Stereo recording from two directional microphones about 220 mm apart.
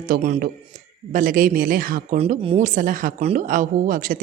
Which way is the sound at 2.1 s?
25° right (ahead or behind).